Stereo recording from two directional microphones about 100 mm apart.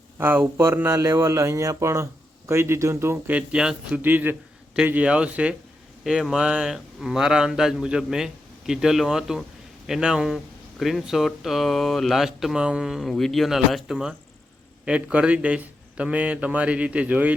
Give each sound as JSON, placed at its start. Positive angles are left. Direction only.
{"t": 0.2, "sound": "a man's voice", "side_deg": -20}
{"t": 3.3, "sound": "a man's voice", "side_deg": -10}